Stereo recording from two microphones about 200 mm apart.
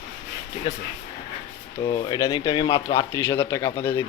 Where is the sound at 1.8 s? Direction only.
20° left (ahead or behind).